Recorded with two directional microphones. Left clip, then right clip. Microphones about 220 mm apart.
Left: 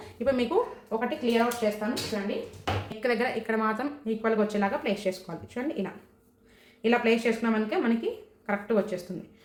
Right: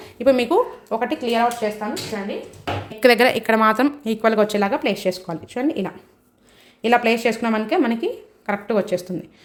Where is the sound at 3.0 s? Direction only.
50° right (ahead or behind).